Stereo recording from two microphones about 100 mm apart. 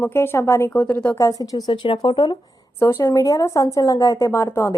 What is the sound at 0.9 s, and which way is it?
Speech, 15° left (ahead or behind).